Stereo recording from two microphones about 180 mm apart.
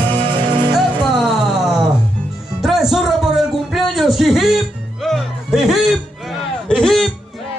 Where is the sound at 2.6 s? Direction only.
Centre (ahead or behind).